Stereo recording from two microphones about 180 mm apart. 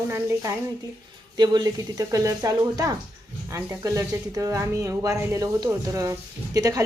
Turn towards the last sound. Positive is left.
turn(degrees=-20)  # may be behind; listen again after turning